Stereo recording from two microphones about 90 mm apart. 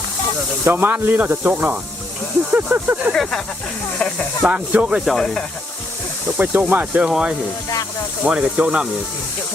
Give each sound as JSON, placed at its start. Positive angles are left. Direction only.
{"t": 0.6, "sound": "speech", "side_deg": -25}
{"t": 3.1, "sound": "a sound", "side_deg": 5}
{"t": 3.9, "sound": "speech", "side_deg": 10}
{"t": 4.4, "sound": "speech", "side_deg": -15}
{"t": 5.1, "sound": "speech", "side_deg": 5}
{"t": 6.3, "sound": "speech", "side_deg": -20}